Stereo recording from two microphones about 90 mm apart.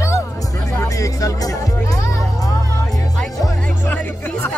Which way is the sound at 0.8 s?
40° left (ahead or behind).